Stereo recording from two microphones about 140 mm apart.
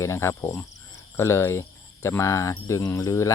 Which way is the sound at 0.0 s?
20° left (ahead or behind).